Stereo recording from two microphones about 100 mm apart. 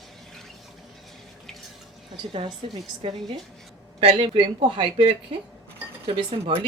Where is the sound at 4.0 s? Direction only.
65° right (ahead or behind).